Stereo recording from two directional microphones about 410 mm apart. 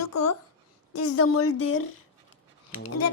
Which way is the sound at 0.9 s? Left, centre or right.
Left.